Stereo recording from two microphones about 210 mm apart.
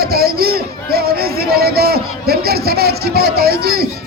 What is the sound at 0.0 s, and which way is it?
Speech, 45° right (ahead or behind).